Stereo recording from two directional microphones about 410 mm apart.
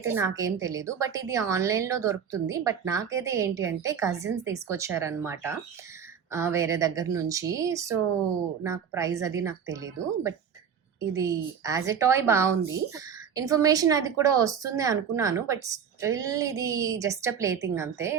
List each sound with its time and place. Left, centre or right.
0.0 s a woman's voice: centre